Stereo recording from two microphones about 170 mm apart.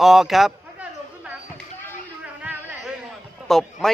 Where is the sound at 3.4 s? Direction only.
Centre (ahead or behind).